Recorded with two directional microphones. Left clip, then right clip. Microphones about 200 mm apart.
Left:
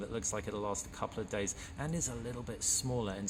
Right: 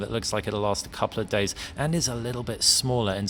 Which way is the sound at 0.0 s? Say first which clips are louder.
Right 10 dB; 40° right (ahead or behind).